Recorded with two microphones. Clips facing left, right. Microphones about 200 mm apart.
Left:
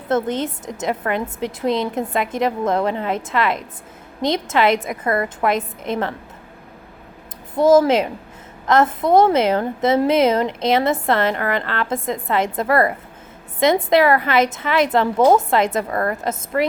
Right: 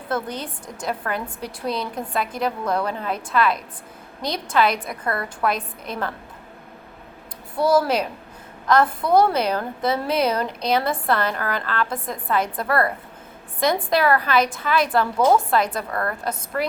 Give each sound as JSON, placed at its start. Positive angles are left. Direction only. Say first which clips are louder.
{"t": 0.1, "sound": "a woman's voice", "louder": "left 7 dB", "side_deg": 20}
{"t": 7.5, "sound": "a woman's voice", "louder": "left 6 dB", "side_deg": 20}
{"t": 13.9, "sound": "a woman's voice", "louder": "left 4 dB", "side_deg": 20}